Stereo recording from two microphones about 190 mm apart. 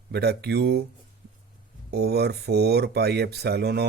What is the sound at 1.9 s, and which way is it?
Speech, 60° right (ahead or behind).